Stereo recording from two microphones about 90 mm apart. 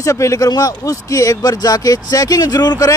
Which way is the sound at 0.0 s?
35° left (ahead or behind).